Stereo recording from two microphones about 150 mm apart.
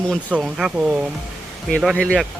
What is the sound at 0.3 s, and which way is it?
Speech, 5° right (ahead or behind).